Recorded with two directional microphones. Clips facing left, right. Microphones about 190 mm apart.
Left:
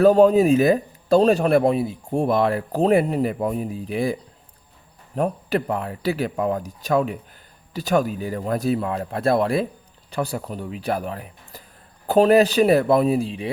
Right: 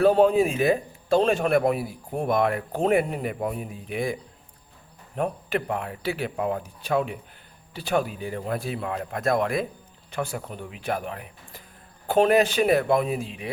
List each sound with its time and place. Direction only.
0.0 s speech: 40° left (ahead or behind)